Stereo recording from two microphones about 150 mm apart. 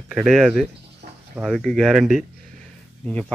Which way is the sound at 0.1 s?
5° right (ahead or behind).